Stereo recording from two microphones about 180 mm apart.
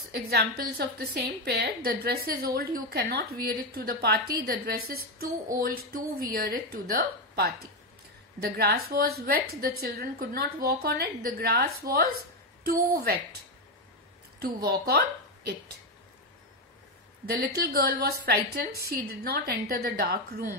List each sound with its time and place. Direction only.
0.3 s a woman's voice: 60° right (ahead or behind)
14.4 s a woman's voice: 60° right (ahead or behind)
17.3 s a woman's voice: 60° right (ahead or behind)